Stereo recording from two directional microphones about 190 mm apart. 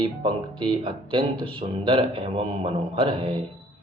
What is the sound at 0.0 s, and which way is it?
Speech, 25° right (ahead or behind).